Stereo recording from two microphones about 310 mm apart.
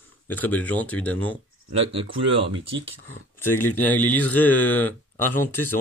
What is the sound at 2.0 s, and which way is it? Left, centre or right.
Speech, centre.